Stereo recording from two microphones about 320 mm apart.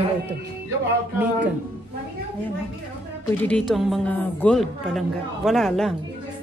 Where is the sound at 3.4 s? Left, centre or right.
Centre.